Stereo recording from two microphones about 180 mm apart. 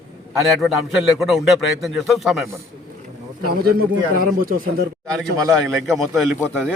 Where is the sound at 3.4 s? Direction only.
60° right (ahead or behind).